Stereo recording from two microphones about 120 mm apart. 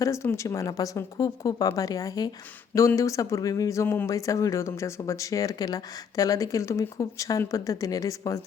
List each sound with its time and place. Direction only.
0.0 s speech: 25° left (ahead or behind)